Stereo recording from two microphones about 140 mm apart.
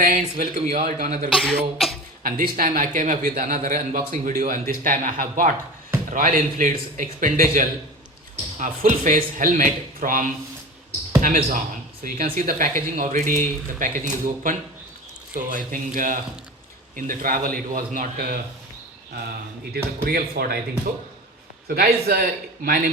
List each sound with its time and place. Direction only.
0.3 s speech: 55° right (ahead or behind)
1.3 s speech: 5° right (ahead or behind)
2.2 s speech: 90° right
12.0 s speech: 90° right
19.7 s a man's voice: 90° right
21.7 s a man's voice: 90° right